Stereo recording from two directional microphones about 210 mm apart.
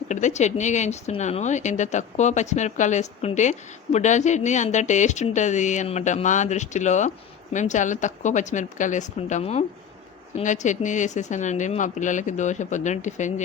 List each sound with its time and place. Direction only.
0.1 s speech: 35° left (ahead or behind)